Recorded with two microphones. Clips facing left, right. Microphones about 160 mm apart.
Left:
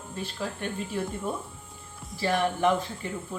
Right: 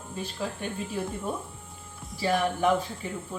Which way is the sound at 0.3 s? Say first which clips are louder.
Even; 10° right (ahead or behind).